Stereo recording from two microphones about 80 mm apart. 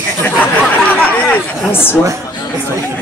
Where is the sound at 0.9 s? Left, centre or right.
Centre.